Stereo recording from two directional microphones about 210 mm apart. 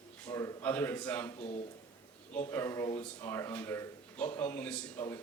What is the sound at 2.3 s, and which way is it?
Speech, 10° left (ahead or behind).